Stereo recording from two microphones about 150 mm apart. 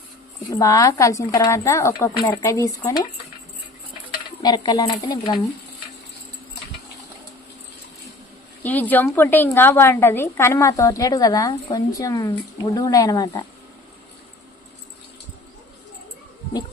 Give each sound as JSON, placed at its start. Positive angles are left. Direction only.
{"t": 0.5, "sound": "a woman's voice", "side_deg": 20}
{"t": 4.4, "sound": "a woman's voice", "side_deg": 25}
{"t": 8.6, "sound": "a woman's voice", "side_deg": 10}